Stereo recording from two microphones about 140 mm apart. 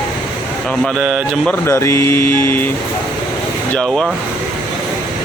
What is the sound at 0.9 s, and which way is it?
Speech, centre (ahead or behind).